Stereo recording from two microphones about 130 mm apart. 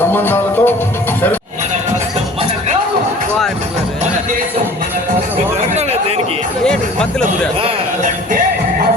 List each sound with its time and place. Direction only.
0.0 s music: 15° left (ahead or behind)
5.7 s a sound: 55° right (ahead or behind)
6.7 s music: 5° left (ahead or behind)